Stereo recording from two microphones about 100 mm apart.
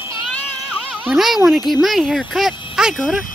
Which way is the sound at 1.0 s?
Centre (ahead or behind).